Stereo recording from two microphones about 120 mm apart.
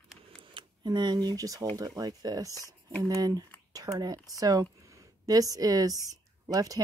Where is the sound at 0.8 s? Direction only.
35° right (ahead or behind).